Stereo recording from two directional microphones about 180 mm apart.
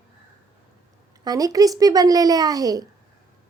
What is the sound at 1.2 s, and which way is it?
A child's voice, 20° right (ahead or behind).